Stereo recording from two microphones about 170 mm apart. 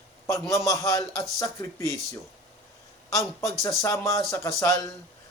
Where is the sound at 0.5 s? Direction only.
20° left (ahead or behind).